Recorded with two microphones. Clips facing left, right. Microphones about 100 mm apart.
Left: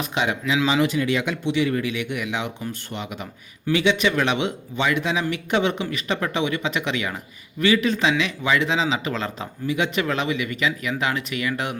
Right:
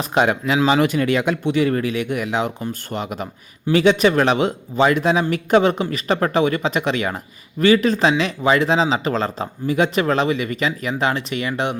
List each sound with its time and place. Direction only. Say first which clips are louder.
0.0 s speech: right 6 dB; 45° right (ahead or behind); by 11.8 s 25° right (ahead or behind)